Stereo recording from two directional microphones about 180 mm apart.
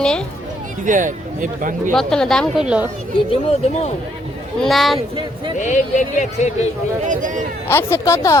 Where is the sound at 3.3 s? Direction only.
35° left (ahead or behind).